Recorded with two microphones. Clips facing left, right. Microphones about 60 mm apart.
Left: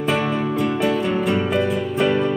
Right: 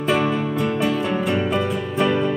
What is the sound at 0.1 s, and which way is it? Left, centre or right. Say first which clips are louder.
Music: right 2 dB; centre.